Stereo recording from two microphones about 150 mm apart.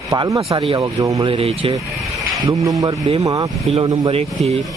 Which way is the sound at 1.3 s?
40° right (ahead or behind).